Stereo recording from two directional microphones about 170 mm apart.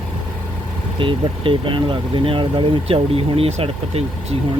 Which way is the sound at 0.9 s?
30° right (ahead or behind).